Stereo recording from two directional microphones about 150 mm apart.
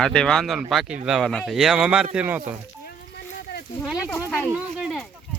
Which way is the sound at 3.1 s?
90° left.